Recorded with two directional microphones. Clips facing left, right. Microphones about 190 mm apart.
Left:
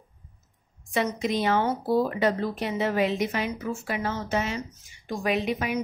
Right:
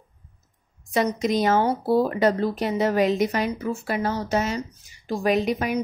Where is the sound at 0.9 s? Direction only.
40° right (ahead or behind).